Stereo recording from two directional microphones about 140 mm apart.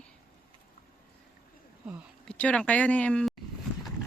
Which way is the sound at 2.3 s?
10° left (ahead or behind).